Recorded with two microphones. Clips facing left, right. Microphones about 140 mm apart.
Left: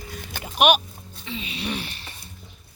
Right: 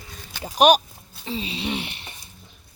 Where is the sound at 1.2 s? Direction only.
35° right (ahead or behind).